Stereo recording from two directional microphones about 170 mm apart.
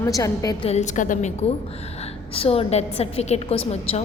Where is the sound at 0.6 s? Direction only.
40° left (ahead or behind).